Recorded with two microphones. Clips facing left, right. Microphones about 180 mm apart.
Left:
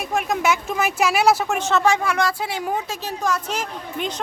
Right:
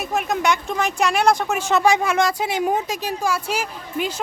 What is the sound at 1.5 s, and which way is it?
Speech, 10° right (ahead or behind).